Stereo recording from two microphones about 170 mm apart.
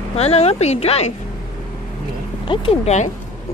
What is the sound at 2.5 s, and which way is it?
Speech, 35° left (ahead or behind).